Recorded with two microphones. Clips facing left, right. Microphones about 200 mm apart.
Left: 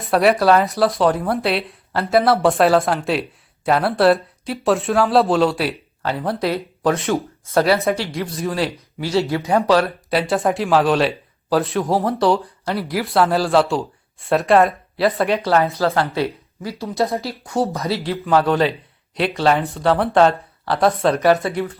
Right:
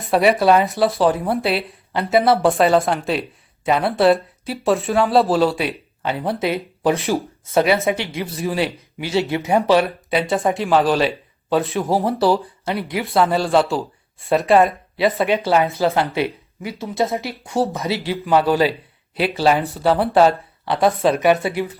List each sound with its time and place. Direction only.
0.0 s speech: centre (ahead or behind)
8.1 s speech: centre (ahead or behind)
9.3 s speech: 15° right (ahead or behind)
10.1 s speech: centre (ahead or behind)
15.8 s speech: 20° right (ahead or behind)
16.7 s speech: centre (ahead or behind)
17.5 s speech: 30° right (ahead or behind)
18.3 s speech: 5° right (ahead or behind)